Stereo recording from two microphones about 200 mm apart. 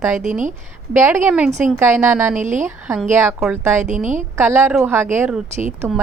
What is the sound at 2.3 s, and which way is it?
Speech, 40° right (ahead or behind).